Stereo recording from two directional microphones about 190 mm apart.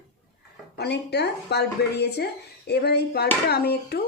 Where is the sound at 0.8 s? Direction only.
60° left (ahead or behind).